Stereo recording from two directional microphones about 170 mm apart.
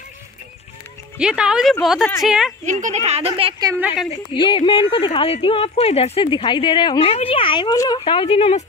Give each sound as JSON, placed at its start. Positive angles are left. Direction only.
{"t": 1.1, "sound": "speech", "side_deg": -5}
{"t": 2.6, "sound": "speech", "side_deg": -45}
{"t": 4.3, "sound": "speech", "side_deg": 30}
{"t": 8.0, "sound": "speech", "side_deg": 30}